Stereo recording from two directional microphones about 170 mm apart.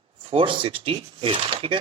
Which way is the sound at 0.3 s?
30° right (ahead or behind).